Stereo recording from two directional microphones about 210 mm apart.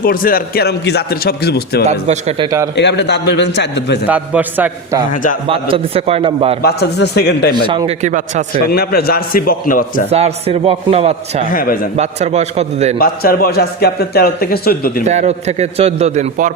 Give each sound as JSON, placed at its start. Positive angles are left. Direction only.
{"t": 0.0, "sound": "a man's voice", "side_deg": 45}
{"t": 1.9, "sound": "a man's voice", "side_deg": -30}
{"t": 2.7, "sound": "a man's voice", "side_deg": 55}
{"t": 4.1, "sound": "a man's voice", "side_deg": -10}
{"t": 5.1, "sound": "a man's voice", "side_deg": 40}
{"t": 5.5, "sound": "a man's voice", "side_deg": -25}
{"t": 6.6, "sound": "a man's voice", "side_deg": 50}
{"t": 7.5, "sound": "a man's voice", "side_deg": -20}
{"t": 8.5, "sound": "a man's voice", "side_deg": 45}
{"t": 10.1, "sound": "a man's voice", "side_deg": -30}
{"t": 11.4, "sound": "a man's voice", "side_deg": 40}
{"t": 11.9, "sound": "a man's voice", "side_deg": -30}
{"t": 13.0, "sound": "a man's voice", "side_deg": 45}
{"t": 15.0, "sound": "a man's voice", "side_deg": -35}